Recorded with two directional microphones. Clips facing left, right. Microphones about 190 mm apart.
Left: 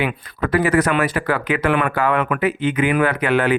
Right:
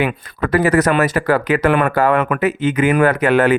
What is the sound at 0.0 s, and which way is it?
Speech, 45° right (ahead or behind).